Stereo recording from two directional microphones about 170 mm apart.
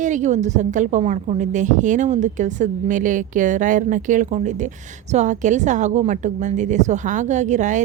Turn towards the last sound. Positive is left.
turn(degrees=-45)  # may be behind; listen again after turning